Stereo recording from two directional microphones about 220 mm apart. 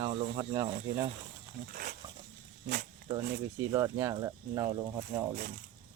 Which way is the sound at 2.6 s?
45° right (ahead or behind).